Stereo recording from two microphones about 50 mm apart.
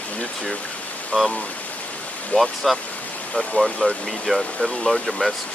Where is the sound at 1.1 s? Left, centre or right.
Left.